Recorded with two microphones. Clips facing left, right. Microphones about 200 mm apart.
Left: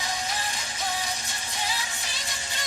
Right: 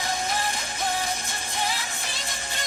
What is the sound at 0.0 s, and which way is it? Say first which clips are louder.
Music: right 4 dB; 55° right (ahead or behind).